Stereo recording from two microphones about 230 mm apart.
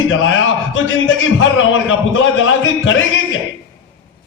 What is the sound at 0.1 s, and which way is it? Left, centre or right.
A man's voice, left.